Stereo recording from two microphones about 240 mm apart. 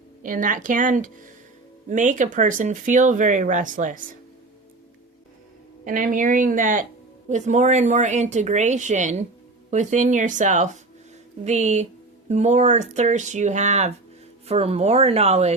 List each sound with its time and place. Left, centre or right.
0.2 s speech: right
5.8 s speech: right